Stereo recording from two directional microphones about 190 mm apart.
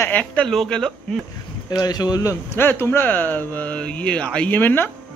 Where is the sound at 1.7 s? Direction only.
20° left (ahead or behind).